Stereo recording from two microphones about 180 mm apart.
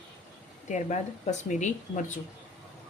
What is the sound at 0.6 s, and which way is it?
Speech, 40° left (ahead or behind).